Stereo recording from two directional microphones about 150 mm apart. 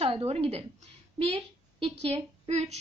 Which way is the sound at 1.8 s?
40° right (ahead or behind).